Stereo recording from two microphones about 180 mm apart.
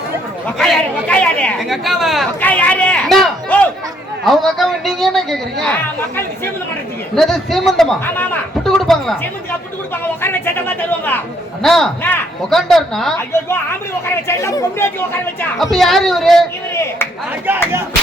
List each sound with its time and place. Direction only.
0.4 s a man's voice: 5° left (ahead or behind)
7.2 s a man's voice: centre (ahead or behind)
8.6 s a sound: centre (ahead or behind)
9.9 s a man's voice: 10° left (ahead or behind)
13.3 s speech: 15° left (ahead or behind)
15.4 s a man's voice: centre (ahead or behind)